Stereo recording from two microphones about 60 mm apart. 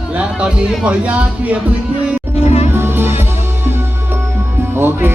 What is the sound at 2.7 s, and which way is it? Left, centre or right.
Music, right.